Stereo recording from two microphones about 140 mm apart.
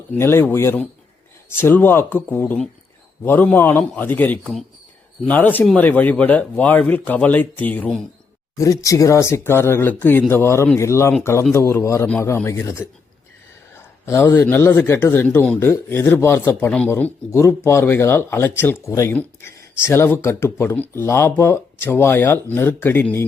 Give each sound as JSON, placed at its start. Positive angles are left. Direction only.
{"t": 0.1, "sound": "speech", "side_deg": 20}
{"t": 8.5, "sound": "speech", "side_deg": 25}